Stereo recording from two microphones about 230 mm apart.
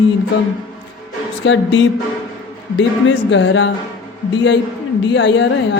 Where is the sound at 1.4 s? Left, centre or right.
Left.